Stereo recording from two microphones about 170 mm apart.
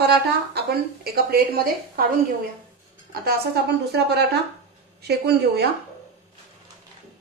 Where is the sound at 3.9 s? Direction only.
75° right (ahead or behind).